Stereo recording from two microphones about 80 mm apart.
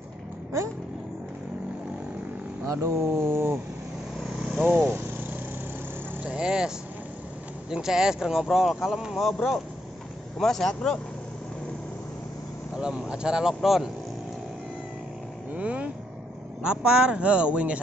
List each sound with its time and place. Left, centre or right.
2.6 s speech: right
4.6 s vehicle: right
6.2 s vehicle: centre
7.7 s speech: centre
12.7 s speech: centre
15.5 s vehicle: centre
16.6 s speech: centre